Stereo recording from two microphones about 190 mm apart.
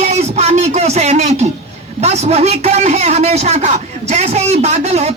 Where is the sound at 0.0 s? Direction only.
35° right (ahead or behind).